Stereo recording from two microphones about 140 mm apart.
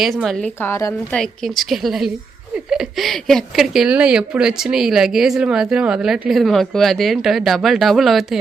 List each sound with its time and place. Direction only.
0.0 s speech: centre (ahead or behind)
0.6 s a woman's voice: 20° left (ahead or behind)
1.1 s speech: centre (ahead or behind)